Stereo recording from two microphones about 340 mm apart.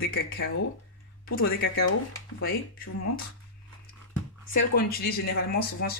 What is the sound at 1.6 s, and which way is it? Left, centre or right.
Speech, left.